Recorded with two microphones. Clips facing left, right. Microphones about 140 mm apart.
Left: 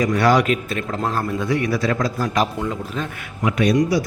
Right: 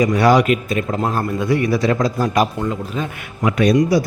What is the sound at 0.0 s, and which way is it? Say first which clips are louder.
A man's voice: right 3 dB; 10° right (ahead or behind).